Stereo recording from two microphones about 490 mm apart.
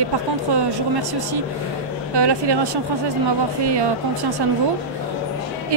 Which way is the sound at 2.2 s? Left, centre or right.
Right.